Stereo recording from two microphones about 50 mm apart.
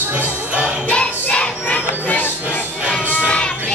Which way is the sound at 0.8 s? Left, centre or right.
Left.